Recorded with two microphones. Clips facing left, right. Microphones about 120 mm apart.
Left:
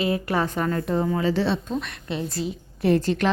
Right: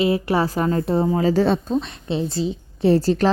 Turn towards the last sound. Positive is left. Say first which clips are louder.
# right 4 dB
turn(degrees=-35)  # may be behind; listen again after turning